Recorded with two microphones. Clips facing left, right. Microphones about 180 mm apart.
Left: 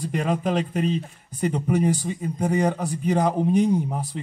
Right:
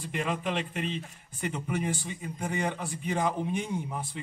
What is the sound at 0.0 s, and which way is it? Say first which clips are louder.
A man's voice: left 7 dB; 40° left (ahead or behind).